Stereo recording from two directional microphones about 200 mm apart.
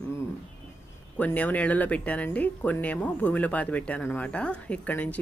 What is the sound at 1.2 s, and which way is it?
Speech, 10° left (ahead or behind).